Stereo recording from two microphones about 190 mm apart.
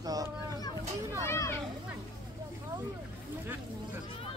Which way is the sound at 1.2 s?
15° left (ahead or behind).